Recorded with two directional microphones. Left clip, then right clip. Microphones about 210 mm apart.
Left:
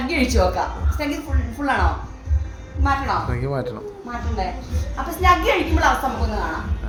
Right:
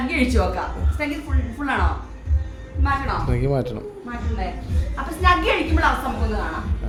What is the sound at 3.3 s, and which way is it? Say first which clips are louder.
Speech: right 2 dB; 30° right (ahead or behind).